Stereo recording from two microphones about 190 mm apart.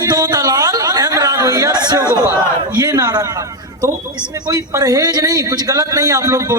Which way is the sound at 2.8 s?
20° right (ahead or behind).